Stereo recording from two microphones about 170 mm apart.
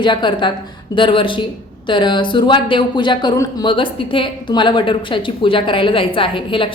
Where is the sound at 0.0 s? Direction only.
25° left (ahead or behind).